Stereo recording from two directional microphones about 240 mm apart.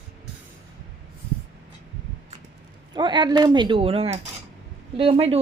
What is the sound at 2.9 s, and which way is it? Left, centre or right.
A woman's voice, centre.